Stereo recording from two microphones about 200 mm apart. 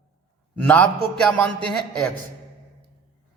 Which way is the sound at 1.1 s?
5° left (ahead or behind).